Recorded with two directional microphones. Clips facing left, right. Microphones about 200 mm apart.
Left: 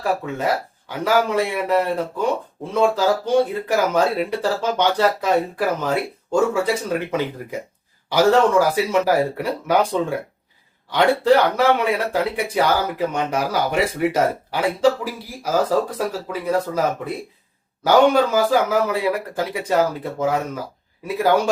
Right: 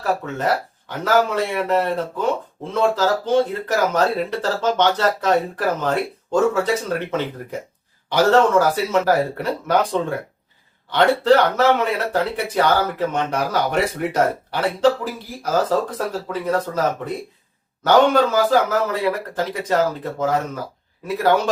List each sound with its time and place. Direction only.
0.0 s speech: 10° left (ahead or behind)